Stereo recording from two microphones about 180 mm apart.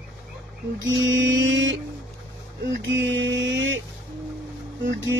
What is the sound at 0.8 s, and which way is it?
Mantra, 90° right.